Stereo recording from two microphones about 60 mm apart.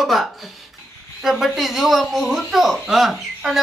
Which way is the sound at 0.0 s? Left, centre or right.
Centre.